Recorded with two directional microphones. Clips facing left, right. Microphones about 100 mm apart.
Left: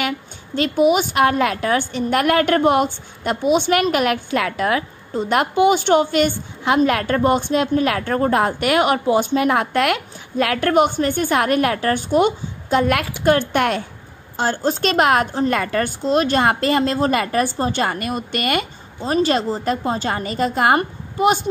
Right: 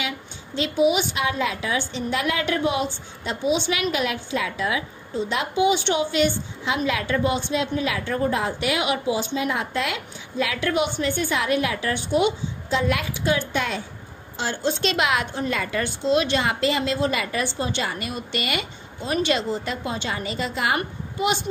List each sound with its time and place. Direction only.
0.6 s a woman's voice: 50° left (ahead or behind)
14.3 s a woman's voice: 45° left (ahead or behind)
19.0 s a woman's voice: 35° left (ahead or behind)